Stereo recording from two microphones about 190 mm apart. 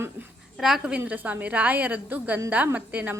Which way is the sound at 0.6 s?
5° right (ahead or behind).